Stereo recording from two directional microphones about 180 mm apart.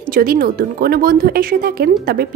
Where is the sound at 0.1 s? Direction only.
55° right (ahead or behind).